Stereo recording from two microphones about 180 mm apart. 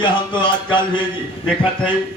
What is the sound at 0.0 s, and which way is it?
Speech, 25° left (ahead or behind).